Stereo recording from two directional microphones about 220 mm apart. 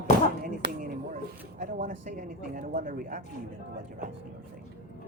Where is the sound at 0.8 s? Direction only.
35° right (ahead or behind).